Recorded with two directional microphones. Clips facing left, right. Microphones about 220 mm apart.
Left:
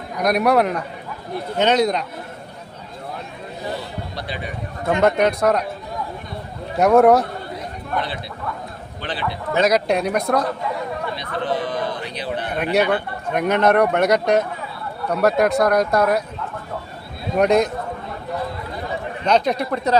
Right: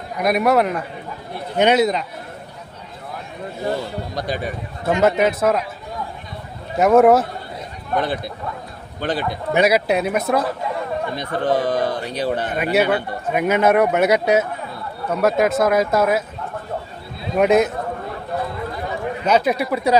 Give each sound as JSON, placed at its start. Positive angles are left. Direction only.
{"t": 0.2, "sound": "speech", "side_deg": 0}
{"t": 4.1, "sound": "a man's voice", "side_deg": -45}
{"t": 4.9, "sound": "speech", "side_deg": -5}
{"t": 6.7, "sound": "speech", "side_deg": 0}
{"t": 7.9, "sound": "speech", "side_deg": -50}
{"t": 9.5, "sound": "speech", "side_deg": -10}
{"t": 11.1, "sound": "speech", "side_deg": -45}
{"t": 12.7, "sound": "speech", "side_deg": -5}
{"t": 17.3, "sound": "speech", "side_deg": -5}
{"t": 19.2, "sound": "speech", "side_deg": -5}